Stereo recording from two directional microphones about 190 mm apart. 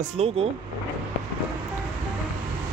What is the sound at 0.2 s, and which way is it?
Speech, 35° right (ahead or behind).